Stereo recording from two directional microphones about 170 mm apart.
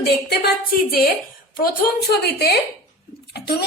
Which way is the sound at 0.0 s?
70° left (ahead or behind).